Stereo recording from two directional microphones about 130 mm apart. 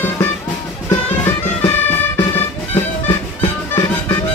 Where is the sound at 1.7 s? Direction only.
15° left (ahead or behind).